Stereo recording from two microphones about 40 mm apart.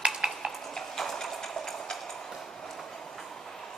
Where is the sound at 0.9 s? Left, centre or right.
Centre.